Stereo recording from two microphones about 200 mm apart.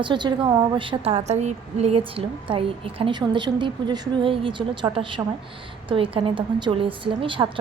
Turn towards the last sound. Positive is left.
turn(degrees=-25)  # may be behind; listen again after turning